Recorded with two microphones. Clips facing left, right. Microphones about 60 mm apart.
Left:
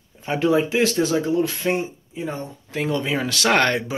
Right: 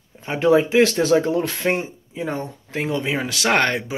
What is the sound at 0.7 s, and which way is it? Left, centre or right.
Speech, right.